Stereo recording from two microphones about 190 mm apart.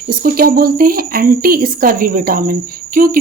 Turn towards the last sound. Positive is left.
turn(degrees=-50)  # may be behind; listen again after turning